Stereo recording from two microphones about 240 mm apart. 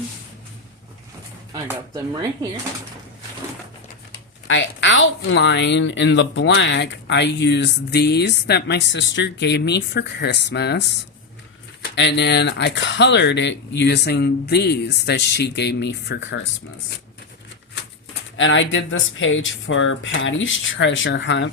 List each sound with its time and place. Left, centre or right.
4.1 s speech: left
18.3 s speech: left